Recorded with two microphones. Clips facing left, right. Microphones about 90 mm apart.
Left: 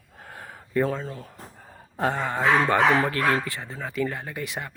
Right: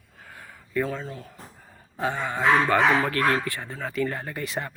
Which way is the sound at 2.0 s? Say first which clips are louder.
Left 2 dB; 45° left (ahead or behind).